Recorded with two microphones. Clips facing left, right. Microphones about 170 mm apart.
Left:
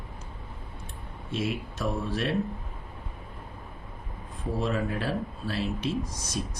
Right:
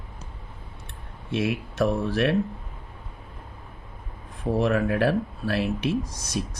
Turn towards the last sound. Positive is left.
turn(degrees=-65)  # may be behind; listen again after turning